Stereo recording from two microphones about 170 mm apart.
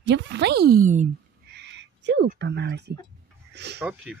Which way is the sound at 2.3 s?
90° right.